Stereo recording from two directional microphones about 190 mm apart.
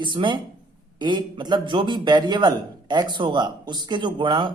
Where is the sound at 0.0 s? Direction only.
25° right (ahead or behind).